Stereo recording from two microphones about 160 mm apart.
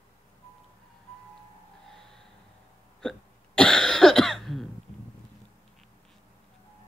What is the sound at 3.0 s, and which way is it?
Hiccup, 5° left (ahead or behind).